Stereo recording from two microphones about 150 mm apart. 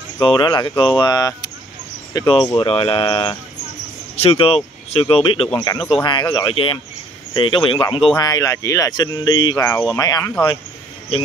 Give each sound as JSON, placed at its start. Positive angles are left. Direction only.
{"t": 0.2, "sound": "speech", "side_deg": 30}
{"t": 8.2, "sound": "speech", "side_deg": 25}